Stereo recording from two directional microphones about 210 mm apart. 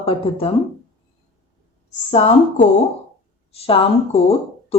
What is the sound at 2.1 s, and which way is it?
A woman's voice, 30° left (ahead or behind).